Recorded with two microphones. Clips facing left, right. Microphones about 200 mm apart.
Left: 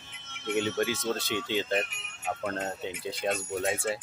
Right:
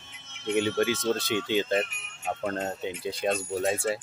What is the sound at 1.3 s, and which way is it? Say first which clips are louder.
Speech: right 4 dB; 10° right (ahead or behind).